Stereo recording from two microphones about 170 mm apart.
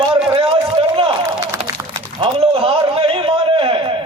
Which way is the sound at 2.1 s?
35° right (ahead or behind).